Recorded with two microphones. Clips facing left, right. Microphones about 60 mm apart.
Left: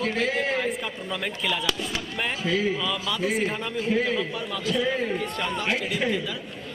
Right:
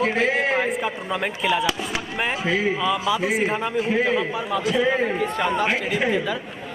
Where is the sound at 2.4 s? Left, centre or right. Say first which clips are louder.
Right 2 dB; right.